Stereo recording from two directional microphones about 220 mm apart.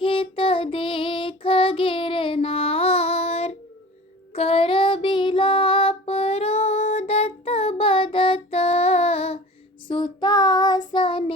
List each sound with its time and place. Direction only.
0.0 s child singing: 25° left (ahead or behind)
4.4 s music: 25° left (ahead or behind)
9.9 s child singing: 20° left (ahead or behind)